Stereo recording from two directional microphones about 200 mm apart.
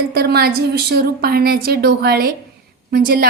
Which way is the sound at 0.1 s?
50° right (ahead or behind).